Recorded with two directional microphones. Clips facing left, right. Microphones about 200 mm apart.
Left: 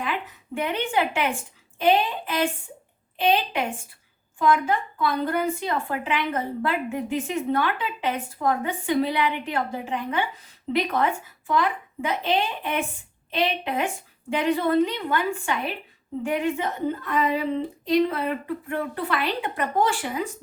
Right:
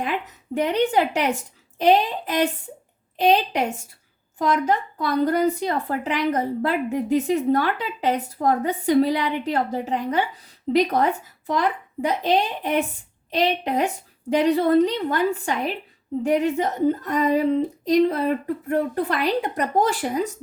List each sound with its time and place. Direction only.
0.5 s a woman's voice: 40° right (ahead or behind)